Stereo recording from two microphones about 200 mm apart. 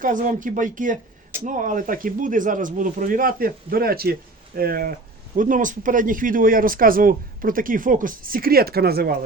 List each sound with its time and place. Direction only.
0.0 s speech: 40° right (ahead or behind)